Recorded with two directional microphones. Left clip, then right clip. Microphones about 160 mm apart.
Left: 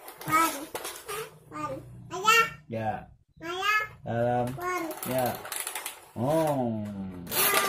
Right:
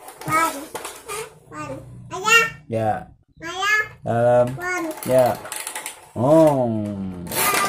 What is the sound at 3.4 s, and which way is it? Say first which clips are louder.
Babbling: right 7 dB; 5° right (ahead or behind).